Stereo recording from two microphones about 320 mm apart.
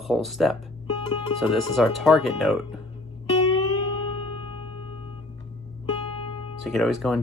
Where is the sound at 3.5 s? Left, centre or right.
Centre.